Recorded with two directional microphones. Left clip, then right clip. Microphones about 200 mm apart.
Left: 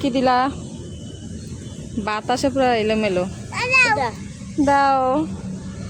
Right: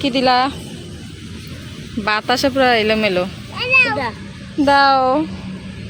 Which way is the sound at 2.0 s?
5° left (ahead or behind).